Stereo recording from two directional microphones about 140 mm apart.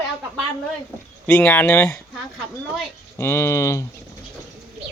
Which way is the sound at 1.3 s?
10° left (ahead or behind).